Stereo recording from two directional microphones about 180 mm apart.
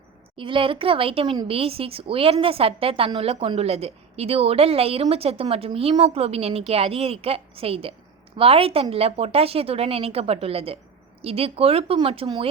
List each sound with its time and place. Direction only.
0.3 s speech: 30° right (ahead or behind)